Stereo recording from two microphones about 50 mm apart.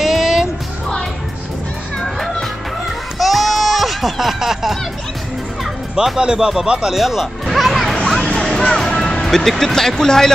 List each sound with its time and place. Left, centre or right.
0.0 s music: centre
3.2 s a sound: centre
5.9 s speech: centre
7.4 s music: centre
8.4 s speech: centre